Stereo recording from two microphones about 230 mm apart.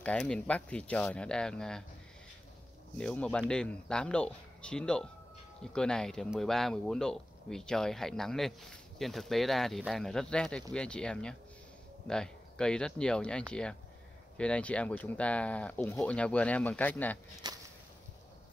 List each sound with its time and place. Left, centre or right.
0.0 s speech: centre
3.0 s speech: centre
17.4 s whip: centre